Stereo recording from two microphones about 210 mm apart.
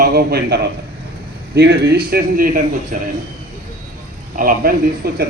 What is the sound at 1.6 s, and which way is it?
Speech, 55° right (ahead or behind).